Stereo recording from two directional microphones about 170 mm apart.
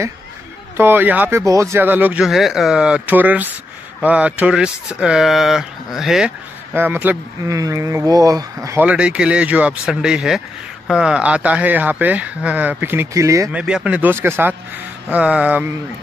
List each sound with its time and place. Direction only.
0.7 s speech: 10° right (ahead or behind)
8.8 s speech: 5° right (ahead or behind)
13.5 s speech: 5° right (ahead or behind)